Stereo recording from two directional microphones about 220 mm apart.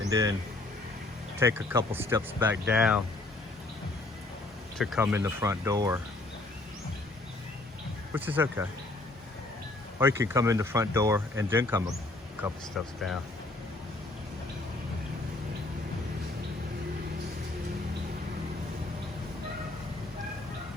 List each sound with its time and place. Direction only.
0.1 s speech: 15° right (ahead or behind)
1.4 s speech: 10° right (ahead or behind)
4.8 s speech: 5° right (ahead or behind)
8.1 s speech: 10° right (ahead or behind)
10.0 s speech: 10° right (ahead or behind)
12.4 s speech: centre (ahead or behind)